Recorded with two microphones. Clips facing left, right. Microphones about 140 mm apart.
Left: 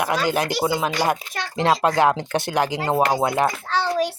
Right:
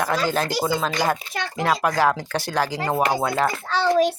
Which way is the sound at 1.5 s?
25° left (ahead or behind).